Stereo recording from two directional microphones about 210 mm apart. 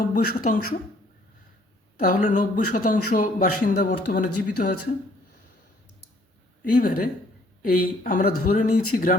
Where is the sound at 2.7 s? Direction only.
45° left (ahead or behind).